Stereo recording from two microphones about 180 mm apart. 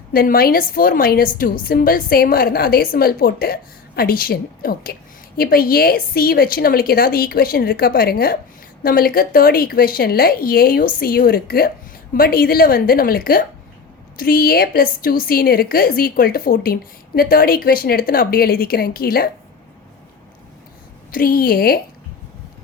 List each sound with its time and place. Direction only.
0.1 s a woman's voice: 55° left (ahead or behind)
21.1 s a woman's voice: 55° left (ahead or behind)